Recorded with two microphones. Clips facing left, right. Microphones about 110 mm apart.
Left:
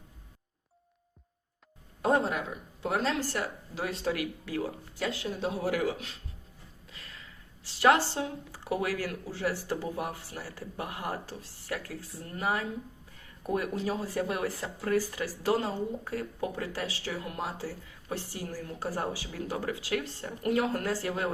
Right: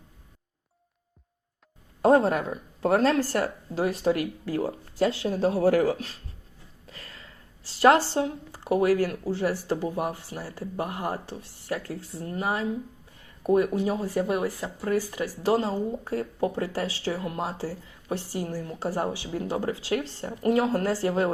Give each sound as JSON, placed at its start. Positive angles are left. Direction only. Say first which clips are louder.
{"t": 2.0, "sound": "speech", "louder": "right 7 dB", "side_deg": -35}
{"t": 6.8, "sound": "a sound", "louder": "right 4 dB", "side_deg": -40}
{"t": 8.6, "sound": "speech", "louder": "right 9 dB", "side_deg": -25}
{"t": 14.4, "sound": "speech", "louder": "right 4 dB", "side_deg": -10}
{"t": 14.8, "sound": "speech", "louder": "right 2 dB", "side_deg": -25}